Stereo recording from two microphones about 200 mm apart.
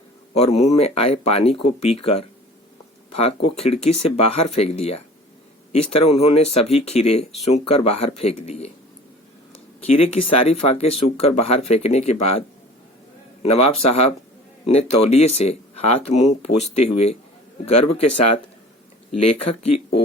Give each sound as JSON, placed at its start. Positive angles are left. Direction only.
{"t": 0.3, "sound": "speech", "side_deg": 30}
{"t": 9.8, "sound": "speech", "side_deg": 30}
{"t": 19.2, "sound": "speech", "side_deg": 30}